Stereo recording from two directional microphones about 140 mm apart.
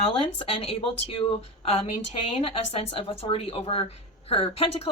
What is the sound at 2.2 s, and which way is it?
Speech, 45° left (ahead or behind).